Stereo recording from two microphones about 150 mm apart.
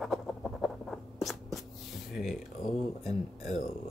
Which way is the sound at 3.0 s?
50° left (ahead or behind).